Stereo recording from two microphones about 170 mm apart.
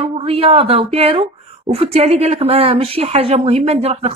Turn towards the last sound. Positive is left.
turn(degrees=-35)  # may be behind; listen again after turning